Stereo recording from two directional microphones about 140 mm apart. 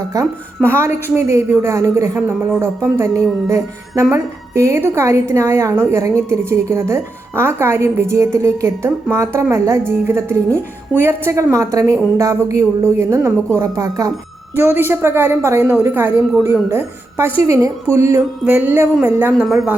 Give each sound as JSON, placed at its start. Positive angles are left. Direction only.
{"t": 0.1, "sound": "a woman's voice", "side_deg": -20}
{"t": 19.3, "sound": "a woman's voice", "side_deg": 0}